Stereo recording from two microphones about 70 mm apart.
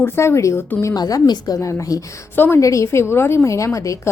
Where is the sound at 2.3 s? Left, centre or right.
Left.